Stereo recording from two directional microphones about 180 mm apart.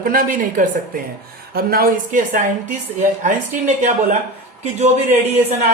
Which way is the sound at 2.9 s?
40° right (ahead or behind).